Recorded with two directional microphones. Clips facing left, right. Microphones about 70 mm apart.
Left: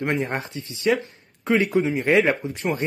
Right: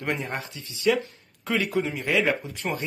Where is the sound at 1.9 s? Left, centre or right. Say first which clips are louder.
Left 5 dB; left.